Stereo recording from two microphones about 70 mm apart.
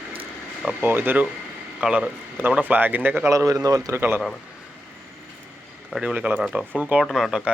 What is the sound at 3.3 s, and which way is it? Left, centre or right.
Speech, right.